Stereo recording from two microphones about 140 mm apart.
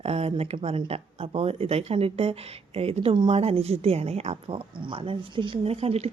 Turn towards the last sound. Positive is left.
turn(degrees=-45)  # may be behind; listen again after turning